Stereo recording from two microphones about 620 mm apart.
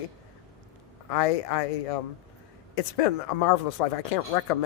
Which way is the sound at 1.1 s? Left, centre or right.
Left.